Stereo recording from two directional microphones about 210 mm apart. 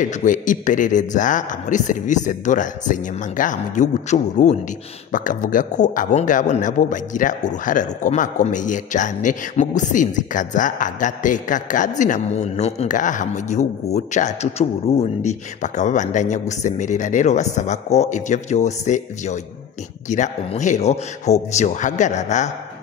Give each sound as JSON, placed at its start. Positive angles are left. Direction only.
{"t": 0.0, "sound": "speech", "side_deg": 40}